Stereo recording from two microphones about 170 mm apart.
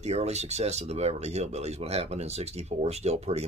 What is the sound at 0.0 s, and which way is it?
Speech, 40° right (ahead or behind).